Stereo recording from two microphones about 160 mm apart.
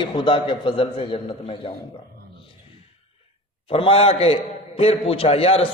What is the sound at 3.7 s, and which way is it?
A man's voice, 35° left (ahead or behind).